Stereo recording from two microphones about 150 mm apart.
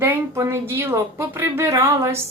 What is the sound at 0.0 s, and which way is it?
Speech, 15° right (ahead or behind).